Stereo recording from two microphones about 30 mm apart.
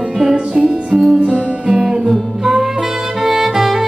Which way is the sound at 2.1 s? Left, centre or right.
Centre.